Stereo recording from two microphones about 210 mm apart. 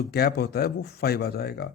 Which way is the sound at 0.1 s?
50° left (ahead or behind).